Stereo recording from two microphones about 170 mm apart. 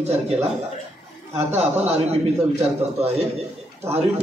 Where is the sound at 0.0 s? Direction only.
40° right (ahead or behind).